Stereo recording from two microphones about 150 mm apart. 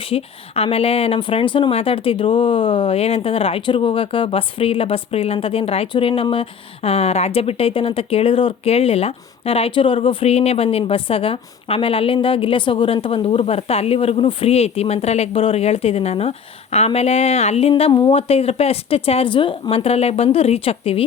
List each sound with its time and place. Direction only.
0.0 s speech: 40° left (ahead or behind)